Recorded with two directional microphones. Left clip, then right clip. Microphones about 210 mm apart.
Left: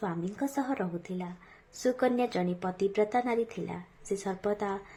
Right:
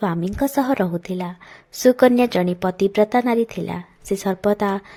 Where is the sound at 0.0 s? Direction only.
40° right (ahead or behind).